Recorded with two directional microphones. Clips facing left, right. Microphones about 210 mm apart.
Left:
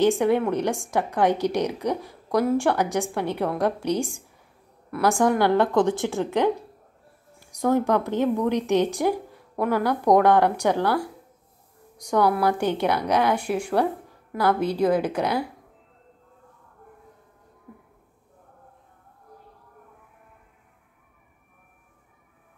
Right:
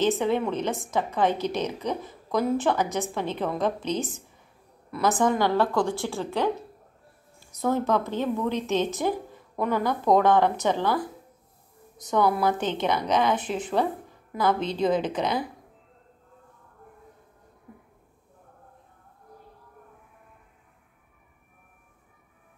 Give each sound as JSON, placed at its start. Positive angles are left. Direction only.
{"t": 0.0, "sound": "speech", "side_deg": 15}